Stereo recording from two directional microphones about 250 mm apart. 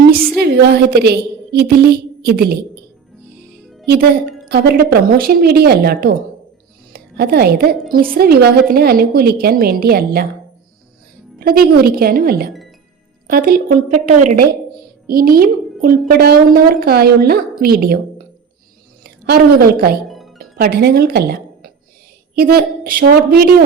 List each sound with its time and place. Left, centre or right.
0.3 s a woman's voice: right
4.4 s a woman's voice: right
11.3 s a woman's voice: right
20.1 s music: centre
20.4 s a woman's voice: right